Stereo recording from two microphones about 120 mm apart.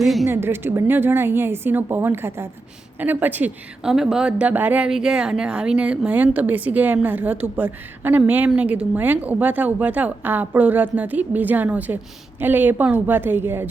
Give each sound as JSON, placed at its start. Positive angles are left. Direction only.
{"t": 0.0, "sound": "a woman's voice", "side_deg": 0}
{"t": 0.3, "sound": "a woman's voice", "side_deg": -20}